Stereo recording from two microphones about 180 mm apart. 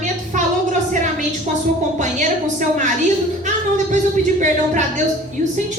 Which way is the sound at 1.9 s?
45° right (ahead or behind).